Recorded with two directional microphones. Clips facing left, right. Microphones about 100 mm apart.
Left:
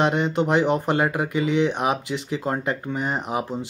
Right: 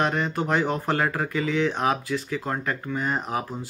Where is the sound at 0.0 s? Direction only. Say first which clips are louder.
Left 4 dB; 20° left (ahead or behind).